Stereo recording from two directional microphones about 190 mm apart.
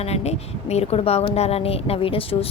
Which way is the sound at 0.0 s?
35° left (ahead or behind).